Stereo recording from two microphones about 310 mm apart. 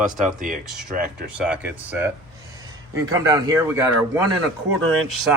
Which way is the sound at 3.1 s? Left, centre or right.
Centre.